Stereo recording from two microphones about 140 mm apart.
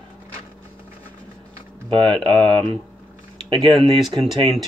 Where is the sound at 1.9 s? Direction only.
35° right (ahead or behind).